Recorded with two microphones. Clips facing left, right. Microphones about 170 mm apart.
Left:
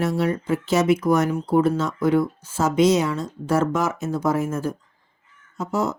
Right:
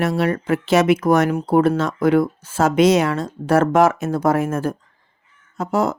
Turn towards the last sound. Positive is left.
turn(degrees=-90)